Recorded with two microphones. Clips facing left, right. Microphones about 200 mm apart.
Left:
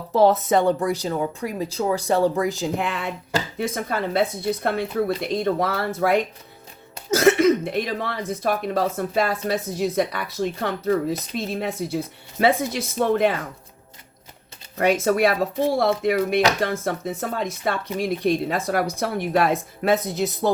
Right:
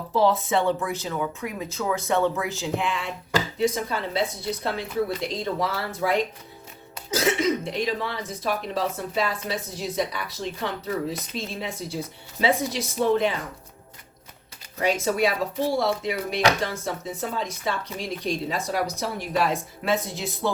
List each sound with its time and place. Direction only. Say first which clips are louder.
0.1 s speech: left 4 dB; 45° left (ahead or behind)
14.8 s speech: left 4 dB; 55° left (ahead or behind)